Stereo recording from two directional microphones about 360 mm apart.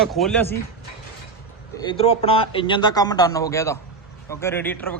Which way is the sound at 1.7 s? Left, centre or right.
Centre.